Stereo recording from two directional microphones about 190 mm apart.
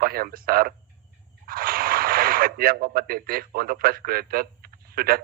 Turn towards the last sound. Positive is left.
turn(degrees=-50)  # may be behind; listen again after turning